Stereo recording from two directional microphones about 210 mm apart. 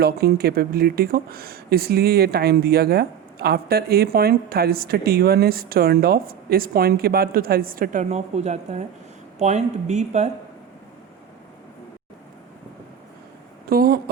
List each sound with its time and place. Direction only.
0.0 s speech: 50° right (ahead or behind); by 10.2 s 35° right (ahead or behind)
13.7 s speech: 45° right (ahead or behind)